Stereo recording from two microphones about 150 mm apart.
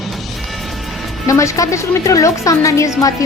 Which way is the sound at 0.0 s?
Centre (ahead or behind).